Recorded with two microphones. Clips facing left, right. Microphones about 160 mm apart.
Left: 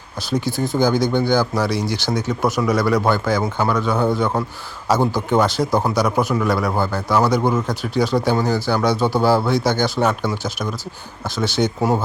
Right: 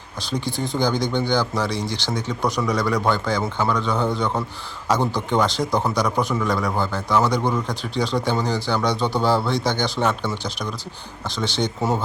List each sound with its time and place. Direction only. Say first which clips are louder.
0.2 s speech: left 5 dB; 10° left (ahead or behind)
0.4 s speech: left 4 dB; 20° right (ahead or behind)
0.8 s speech: left 4 dB; 10° left (ahead or behind)